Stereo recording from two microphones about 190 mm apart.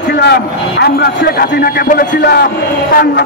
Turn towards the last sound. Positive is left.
turn(degrees=50)  # may be behind; listen again after turning